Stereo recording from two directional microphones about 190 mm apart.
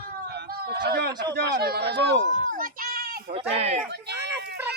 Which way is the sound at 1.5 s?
60° right (ahead or behind).